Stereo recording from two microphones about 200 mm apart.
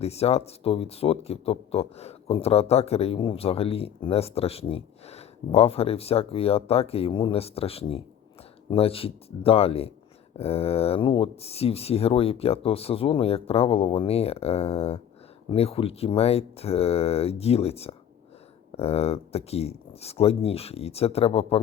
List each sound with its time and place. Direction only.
0.0 s speech: 30° left (ahead or behind)